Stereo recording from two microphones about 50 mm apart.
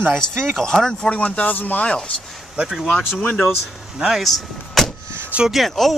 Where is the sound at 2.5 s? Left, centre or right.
Centre.